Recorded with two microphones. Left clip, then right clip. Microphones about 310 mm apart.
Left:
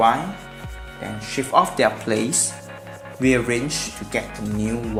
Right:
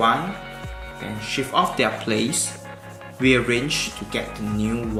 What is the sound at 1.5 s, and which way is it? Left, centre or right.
Speech, left.